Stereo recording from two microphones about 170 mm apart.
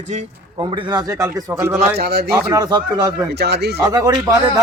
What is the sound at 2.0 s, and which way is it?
Speech, 70° right (ahead or behind).